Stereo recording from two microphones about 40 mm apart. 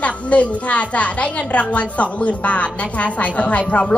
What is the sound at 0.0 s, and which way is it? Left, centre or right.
A woman's voice, left.